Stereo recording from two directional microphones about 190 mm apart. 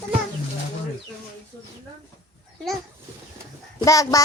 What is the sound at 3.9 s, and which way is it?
Speech, 20° left (ahead or behind).